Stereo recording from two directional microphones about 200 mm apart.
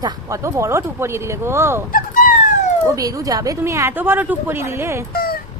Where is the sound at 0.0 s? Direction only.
20° right (ahead or behind).